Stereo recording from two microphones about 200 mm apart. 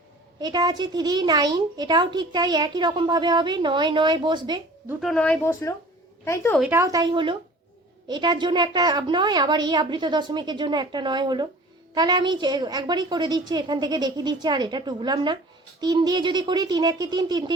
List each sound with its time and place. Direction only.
0.3 s a woman's voice: 20° right (ahead or behind)
4.9 s a woman's voice: centre (ahead or behind)
6.6 s a woman's voice: 10° right (ahead or behind)